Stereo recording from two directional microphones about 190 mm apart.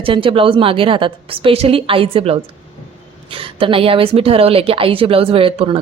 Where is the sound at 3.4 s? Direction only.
30° right (ahead or behind).